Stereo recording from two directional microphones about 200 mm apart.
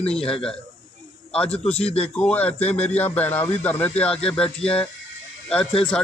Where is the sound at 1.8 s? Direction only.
30° left (ahead or behind).